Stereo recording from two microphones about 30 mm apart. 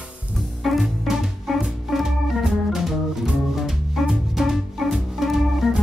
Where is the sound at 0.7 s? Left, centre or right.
Centre.